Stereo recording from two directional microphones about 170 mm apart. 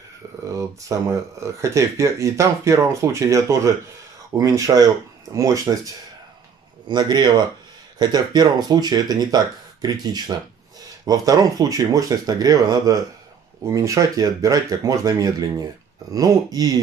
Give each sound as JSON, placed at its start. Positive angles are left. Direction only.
{"t": 0.5, "sound": "speech", "side_deg": -20}
{"t": 6.9, "sound": "speech", "side_deg": -25}